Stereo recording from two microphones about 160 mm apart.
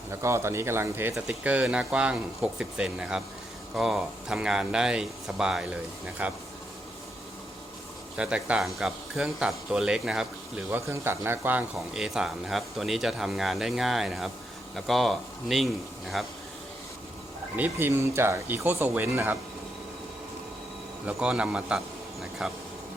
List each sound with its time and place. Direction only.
0.1 s speech: 15° right (ahead or behind)
8.1 s speech: 5° right (ahead or behind)
10.7 s speech: 15° right (ahead or behind); by 16.3 s centre (ahead or behind)
17.6 s speech: 15° right (ahead or behind)
21.1 s speech: 5° right (ahead or behind)